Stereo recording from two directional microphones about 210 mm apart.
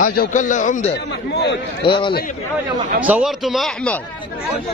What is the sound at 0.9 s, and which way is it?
Speech, 55° left (ahead or behind).